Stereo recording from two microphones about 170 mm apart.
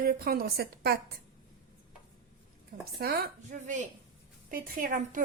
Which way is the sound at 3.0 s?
65° right (ahead or behind).